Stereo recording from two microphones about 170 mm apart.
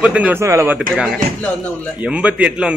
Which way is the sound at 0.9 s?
Centre (ahead or behind).